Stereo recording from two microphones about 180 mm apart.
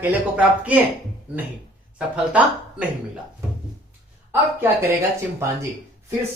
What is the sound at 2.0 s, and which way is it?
Speech, 5° right (ahead or behind).